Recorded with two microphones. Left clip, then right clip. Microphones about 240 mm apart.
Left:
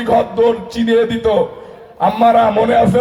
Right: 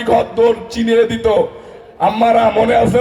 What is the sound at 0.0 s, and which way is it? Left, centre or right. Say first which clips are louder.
A man's voice: even; right.